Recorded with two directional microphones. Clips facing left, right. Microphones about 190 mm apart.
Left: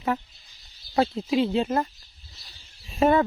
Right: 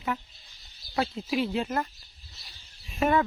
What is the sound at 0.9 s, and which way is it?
Speech, 30° left (ahead or behind).